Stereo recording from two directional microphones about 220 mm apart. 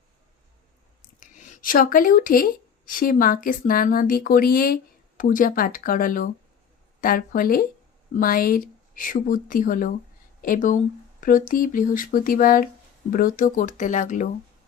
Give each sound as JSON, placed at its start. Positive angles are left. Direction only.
{"t": 1.2, "sound": "a woman's voice", "side_deg": 35}